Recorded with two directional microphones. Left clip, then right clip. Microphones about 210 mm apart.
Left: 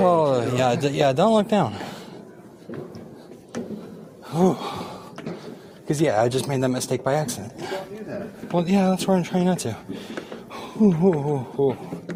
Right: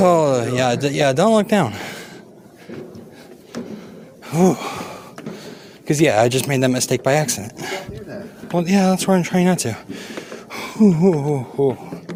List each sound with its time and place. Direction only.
0.0 s speech: 30° right (ahead or behind)
4.3 s a sound: 30° right (ahead or behind)
5.9 s speech: 30° right (ahead or behind)